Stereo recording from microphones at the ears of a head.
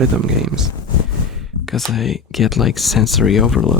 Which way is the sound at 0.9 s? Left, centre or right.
Left.